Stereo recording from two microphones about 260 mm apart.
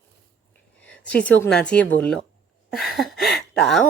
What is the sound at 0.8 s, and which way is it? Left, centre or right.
Speech, centre.